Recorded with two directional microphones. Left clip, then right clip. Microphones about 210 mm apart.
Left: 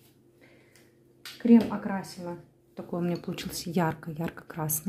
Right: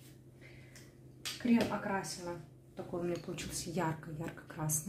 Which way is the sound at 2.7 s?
50° left (ahead or behind).